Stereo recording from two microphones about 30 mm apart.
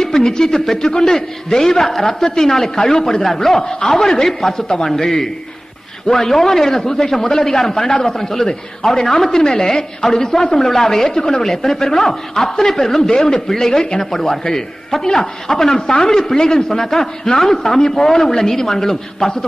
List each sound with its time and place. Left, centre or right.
0.0 s a woman's voice: left
4.3 s a woman's voice: centre
4.6 s speech: left
4.8 s a woman's voice: centre